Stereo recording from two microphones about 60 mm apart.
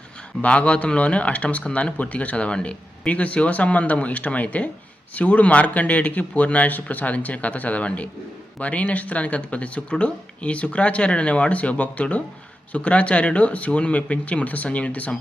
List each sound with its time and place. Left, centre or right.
0.4 s speech: centre